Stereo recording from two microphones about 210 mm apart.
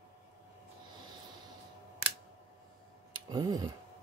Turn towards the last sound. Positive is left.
turn(degrees=-20)  # may be behind; listen again after turning